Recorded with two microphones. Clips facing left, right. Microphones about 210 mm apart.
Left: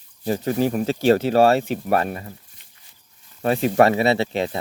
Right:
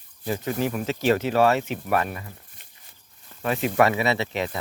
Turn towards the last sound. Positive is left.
turn(degrees=30)  # may be behind; listen again after turning